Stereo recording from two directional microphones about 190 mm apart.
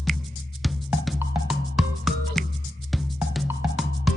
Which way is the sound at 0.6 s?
Centre (ahead or behind).